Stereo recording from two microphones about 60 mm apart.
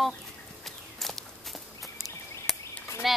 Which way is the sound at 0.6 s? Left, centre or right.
Centre.